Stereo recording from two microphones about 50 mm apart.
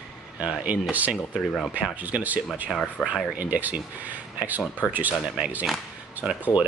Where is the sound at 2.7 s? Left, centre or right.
Centre.